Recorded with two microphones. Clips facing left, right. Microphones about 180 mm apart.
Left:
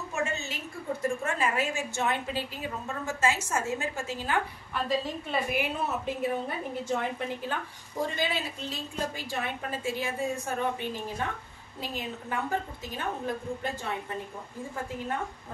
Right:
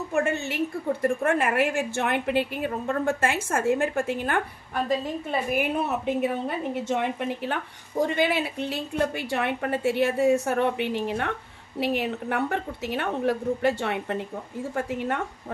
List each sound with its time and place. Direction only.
0.1 s a woman's voice: 55° right (ahead or behind); by 15.2 s 70° right (ahead or behind)